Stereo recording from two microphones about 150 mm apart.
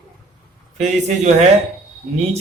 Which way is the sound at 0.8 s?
50° right (ahead or behind).